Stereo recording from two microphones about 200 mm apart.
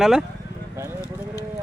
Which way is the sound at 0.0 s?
Centre (ahead or behind).